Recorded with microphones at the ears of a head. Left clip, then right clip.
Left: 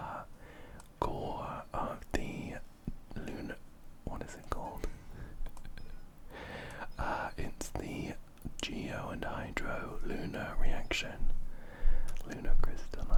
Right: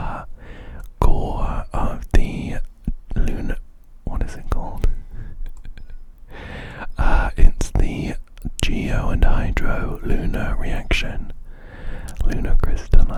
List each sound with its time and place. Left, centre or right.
0.0 s whispering: right